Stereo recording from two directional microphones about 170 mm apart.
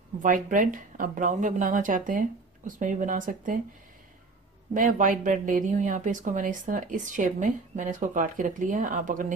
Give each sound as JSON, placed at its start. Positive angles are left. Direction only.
{"t": 0.2, "sound": "speech", "side_deg": -50}
{"t": 4.7, "sound": "speech", "side_deg": -50}